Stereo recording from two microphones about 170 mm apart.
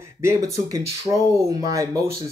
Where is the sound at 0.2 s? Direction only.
20° right (ahead or behind).